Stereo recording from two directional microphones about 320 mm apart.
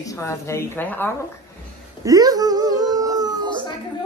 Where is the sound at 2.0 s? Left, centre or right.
Centre.